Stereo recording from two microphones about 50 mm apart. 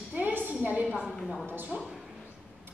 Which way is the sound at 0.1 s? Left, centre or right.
Right.